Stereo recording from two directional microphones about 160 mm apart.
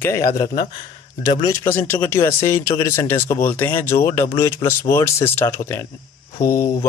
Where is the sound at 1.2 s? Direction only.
25° left (ahead or behind).